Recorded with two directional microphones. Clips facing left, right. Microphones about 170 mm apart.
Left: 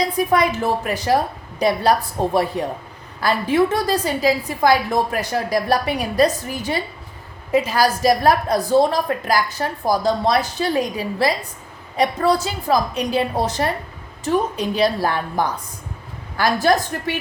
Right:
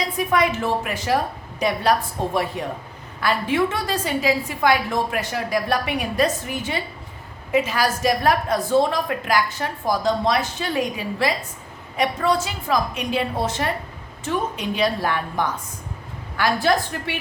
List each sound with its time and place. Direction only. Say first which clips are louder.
0.2 s a woman's voice: left 1 dB; 35° left (ahead or behind)